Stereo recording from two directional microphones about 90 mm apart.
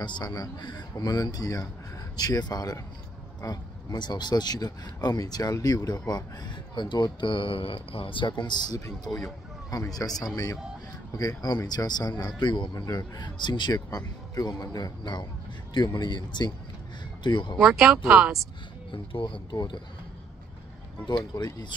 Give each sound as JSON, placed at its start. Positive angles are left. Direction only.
{"t": 0.0, "sound": "a man's voice", "side_deg": 55}
{"t": 0.3, "sound": "speech", "side_deg": 45}
{"t": 8.7, "sound": "speech", "side_deg": 40}
{"t": 17.6, "sound": "speech", "side_deg": -5}
{"t": 18.9, "sound": "speech", "side_deg": 70}
{"t": 19.5, "sound": "speech", "side_deg": 55}
{"t": 21.0, "sound": "speech", "side_deg": 60}